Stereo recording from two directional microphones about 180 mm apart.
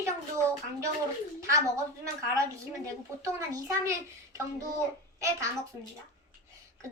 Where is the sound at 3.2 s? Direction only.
15° right (ahead or behind).